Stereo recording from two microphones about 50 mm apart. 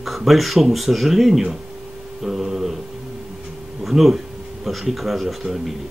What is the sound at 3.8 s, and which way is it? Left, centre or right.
Speech, centre.